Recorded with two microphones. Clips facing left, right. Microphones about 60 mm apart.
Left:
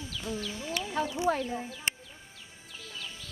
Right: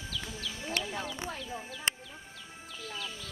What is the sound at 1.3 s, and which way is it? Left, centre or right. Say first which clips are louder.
Speech: left 12 dB; left.